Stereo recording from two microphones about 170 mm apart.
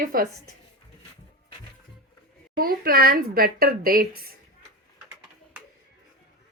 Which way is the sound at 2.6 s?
60° right (ahead or behind).